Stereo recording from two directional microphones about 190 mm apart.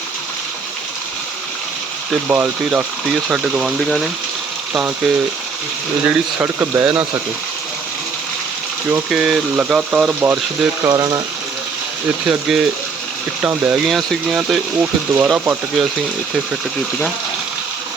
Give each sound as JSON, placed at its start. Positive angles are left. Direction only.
{"t": 2.3, "sound": "speech", "side_deg": -5}
{"t": 6.1, "sound": "speech", "side_deg": -10}
{"t": 8.9, "sound": "speech", "side_deg": 0}
{"t": 10.8, "sound": "speech", "side_deg": -20}
{"t": 12.3, "sound": "speech", "side_deg": -5}